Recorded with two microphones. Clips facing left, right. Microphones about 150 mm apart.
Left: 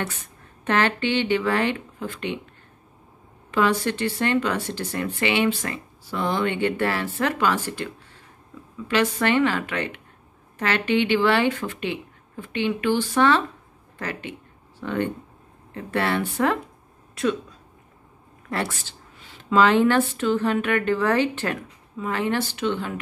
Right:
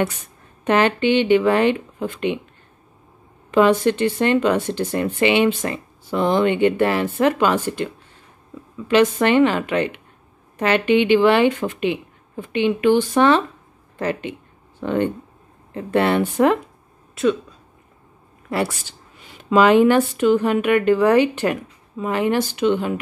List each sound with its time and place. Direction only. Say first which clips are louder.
0.7 s speech: right 5 dB; 15° right (ahead or behind)
3.5 s speech: right 7 dB; 20° right (ahead or behind)
17.1 s speech: right 5 dB; centre (ahead or behind)
18.5 s speech: right 5 dB; 10° right (ahead or behind)